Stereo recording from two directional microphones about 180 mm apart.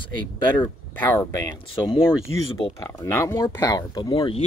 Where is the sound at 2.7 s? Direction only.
15° left (ahead or behind).